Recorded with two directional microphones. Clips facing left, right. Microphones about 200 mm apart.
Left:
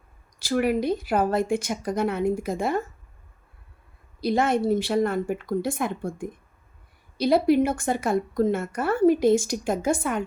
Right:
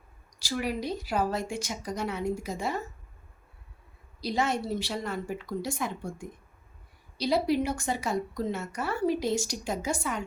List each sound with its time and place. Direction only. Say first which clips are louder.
0.3 s speech: left 8 dB; 55° left (ahead or behind)
4.2 s a woman's voice: left 7 dB; 55° left (ahead or behind)